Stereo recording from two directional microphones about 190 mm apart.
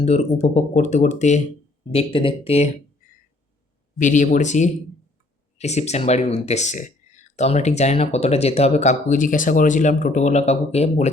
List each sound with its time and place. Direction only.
0.0 s speech: 35° left (ahead or behind)
3.9 s speech: 40° left (ahead or behind)